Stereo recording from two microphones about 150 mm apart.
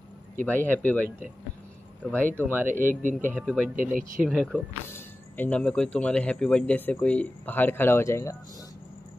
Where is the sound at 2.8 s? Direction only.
65° right (ahead or behind).